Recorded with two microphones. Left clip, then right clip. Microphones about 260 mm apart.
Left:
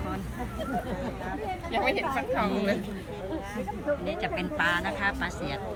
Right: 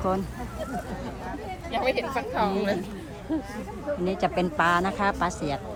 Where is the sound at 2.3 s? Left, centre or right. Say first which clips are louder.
Right 4 dB; right.